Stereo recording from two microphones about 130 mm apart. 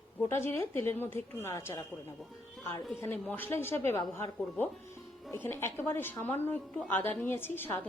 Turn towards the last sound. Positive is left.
turn(degrees=15)  # may be behind; listen again after turning